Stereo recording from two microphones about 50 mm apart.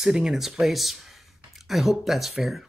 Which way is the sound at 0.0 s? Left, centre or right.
Centre.